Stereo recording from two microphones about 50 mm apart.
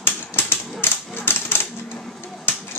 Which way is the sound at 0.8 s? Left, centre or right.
Left.